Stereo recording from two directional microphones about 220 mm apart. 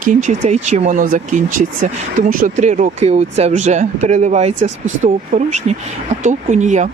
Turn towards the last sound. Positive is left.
turn(degrees=-35)  # may be behind; listen again after turning